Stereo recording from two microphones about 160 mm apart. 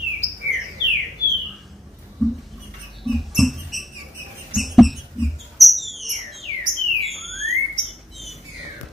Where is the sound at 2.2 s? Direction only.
Centre (ahead or behind).